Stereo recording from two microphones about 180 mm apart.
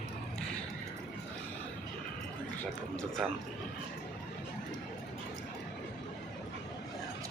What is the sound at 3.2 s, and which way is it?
Speech, 5° right (ahead or behind).